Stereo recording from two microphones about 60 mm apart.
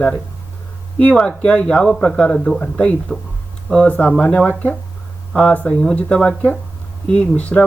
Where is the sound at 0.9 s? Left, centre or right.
Centre.